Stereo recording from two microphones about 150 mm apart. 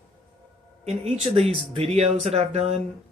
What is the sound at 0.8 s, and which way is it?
Speech, 45° right (ahead or behind).